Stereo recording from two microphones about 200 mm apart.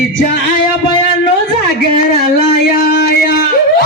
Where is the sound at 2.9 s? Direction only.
55° left (ahead or behind).